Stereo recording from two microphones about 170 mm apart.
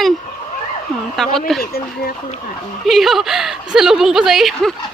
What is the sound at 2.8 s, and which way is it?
A woman's voice, centre (ahead or behind).